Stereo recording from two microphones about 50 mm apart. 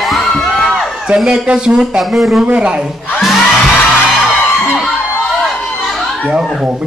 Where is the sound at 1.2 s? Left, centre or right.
Centre.